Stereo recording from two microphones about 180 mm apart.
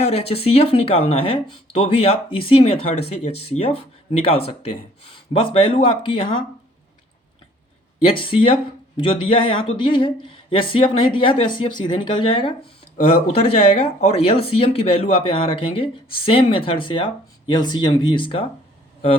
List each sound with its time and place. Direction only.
0.0 s speech: 35° left (ahead or behind)
8.1 s speech: 30° left (ahead or behind)